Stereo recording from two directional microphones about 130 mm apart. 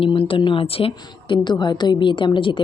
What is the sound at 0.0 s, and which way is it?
A woman's voice, 45° left (ahead or behind).